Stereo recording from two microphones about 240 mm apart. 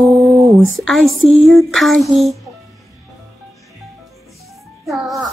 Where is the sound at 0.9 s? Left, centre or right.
Centre.